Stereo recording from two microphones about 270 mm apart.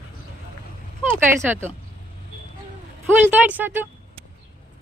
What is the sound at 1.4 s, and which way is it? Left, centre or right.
Speech, centre.